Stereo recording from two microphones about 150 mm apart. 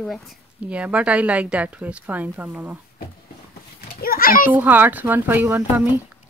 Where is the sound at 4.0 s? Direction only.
75° left (ahead or behind).